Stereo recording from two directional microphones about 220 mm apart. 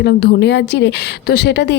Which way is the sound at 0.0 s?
50° left (ahead or behind).